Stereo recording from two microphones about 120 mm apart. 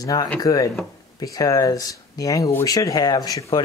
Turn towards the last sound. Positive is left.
turn(degrees=30)  # may be behind; listen again after turning